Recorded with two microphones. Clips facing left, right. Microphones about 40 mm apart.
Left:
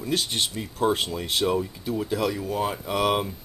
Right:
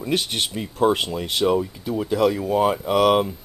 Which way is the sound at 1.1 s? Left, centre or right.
Centre.